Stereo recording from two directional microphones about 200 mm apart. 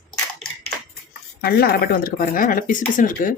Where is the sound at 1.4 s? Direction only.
50° left (ahead or behind).